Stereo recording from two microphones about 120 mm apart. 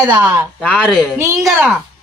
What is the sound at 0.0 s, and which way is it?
Speech, 10° right (ahead or behind).